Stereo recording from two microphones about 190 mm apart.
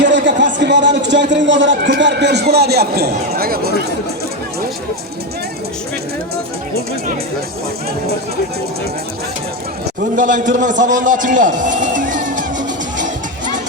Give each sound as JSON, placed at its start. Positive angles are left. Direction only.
{"t": 0.1, "sound": "a man's voice", "side_deg": -70}
{"t": 10.2, "sound": "music", "side_deg": -40}